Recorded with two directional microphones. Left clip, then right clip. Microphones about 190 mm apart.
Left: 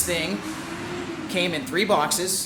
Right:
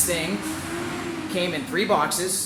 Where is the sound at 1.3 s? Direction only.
25° left (ahead or behind).